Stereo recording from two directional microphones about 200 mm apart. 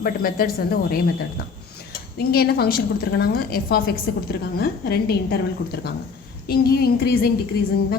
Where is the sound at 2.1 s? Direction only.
50° left (ahead or behind).